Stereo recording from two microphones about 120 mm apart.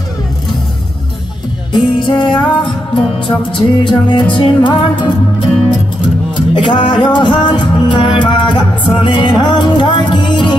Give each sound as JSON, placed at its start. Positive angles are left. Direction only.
{"t": 1.7, "sound": "music", "side_deg": 40}